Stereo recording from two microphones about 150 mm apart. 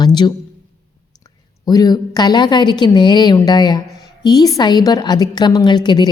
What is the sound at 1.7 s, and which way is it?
A woman's voice, 25° left (ahead or behind).